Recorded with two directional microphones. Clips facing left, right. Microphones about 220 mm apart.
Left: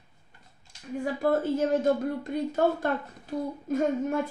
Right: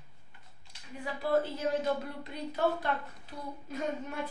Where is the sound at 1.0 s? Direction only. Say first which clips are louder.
Left 4 dB; 50° left (ahead or behind).